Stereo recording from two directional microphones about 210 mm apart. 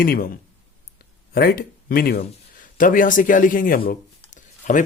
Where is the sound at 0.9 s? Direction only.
45° left (ahead or behind).